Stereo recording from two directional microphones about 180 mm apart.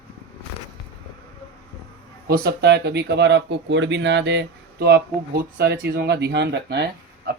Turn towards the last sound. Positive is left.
turn(degrees=-65)  # may be behind; listen again after turning